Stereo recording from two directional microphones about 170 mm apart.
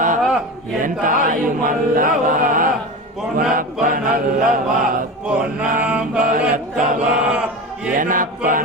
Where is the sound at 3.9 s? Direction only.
55° right (ahead or behind).